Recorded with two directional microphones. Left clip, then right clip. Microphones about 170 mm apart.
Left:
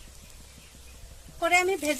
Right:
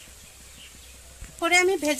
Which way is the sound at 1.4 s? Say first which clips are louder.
Right 3 dB; 50° right (ahead or behind).